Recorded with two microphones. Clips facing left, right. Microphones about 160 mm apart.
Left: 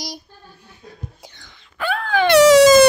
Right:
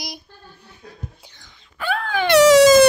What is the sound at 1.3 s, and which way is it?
Wail, 80° left.